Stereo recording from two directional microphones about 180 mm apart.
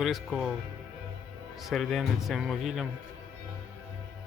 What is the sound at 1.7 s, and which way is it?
A man's voice, centre (ahead or behind).